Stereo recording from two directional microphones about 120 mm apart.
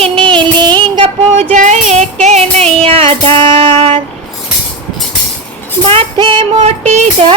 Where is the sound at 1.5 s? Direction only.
80° right; by 4.0 s 50° right (ahead or behind).